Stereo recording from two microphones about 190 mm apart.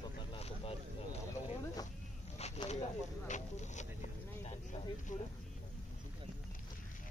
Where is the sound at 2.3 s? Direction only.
35° left (ahead or behind).